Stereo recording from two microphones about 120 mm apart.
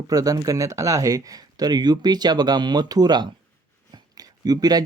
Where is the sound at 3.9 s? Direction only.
30° right (ahead or behind).